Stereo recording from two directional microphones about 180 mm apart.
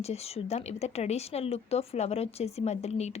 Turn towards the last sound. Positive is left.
turn(degrees=40)  # may be behind; listen again after turning